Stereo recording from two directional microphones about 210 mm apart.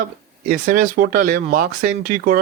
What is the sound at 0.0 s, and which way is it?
Speech, 40° right (ahead or behind).